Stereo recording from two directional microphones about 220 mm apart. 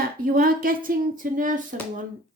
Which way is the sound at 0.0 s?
40° right (ahead or behind).